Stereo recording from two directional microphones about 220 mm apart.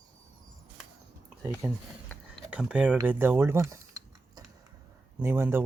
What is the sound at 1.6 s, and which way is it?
Speech, 10° right (ahead or behind).